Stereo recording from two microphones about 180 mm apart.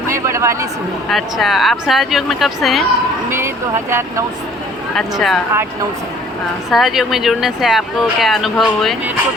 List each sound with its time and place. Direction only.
0.1 s a sound: 15° right (ahead or behind)
1.1 s speech: centre (ahead or behind)
3.2 s speech: 15° right (ahead or behind)
4.9 s speech: centre (ahead or behind)
6.7 s speech: centre (ahead or behind)